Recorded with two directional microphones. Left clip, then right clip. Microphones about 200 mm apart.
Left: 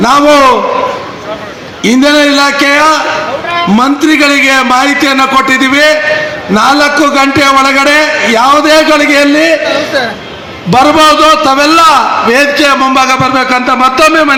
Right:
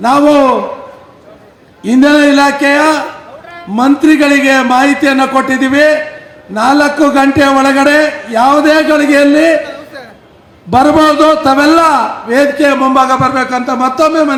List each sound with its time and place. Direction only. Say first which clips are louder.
0.0 s a man's voice: left 3 dB; 55° right (ahead or behind)
1.9 s a man's voice: left 1 dB; 60° right (ahead or behind)
10.7 s a man's voice: left 3 dB; 55° right (ahead or behind)
13.1 s speech: left 3 dB; 30° right (ahead or behind); by 14.3 s 10° right (ahead or behind)